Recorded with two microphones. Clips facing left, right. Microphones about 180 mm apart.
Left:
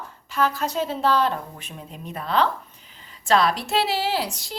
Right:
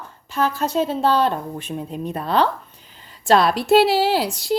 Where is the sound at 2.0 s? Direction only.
35° right (ahead or behind).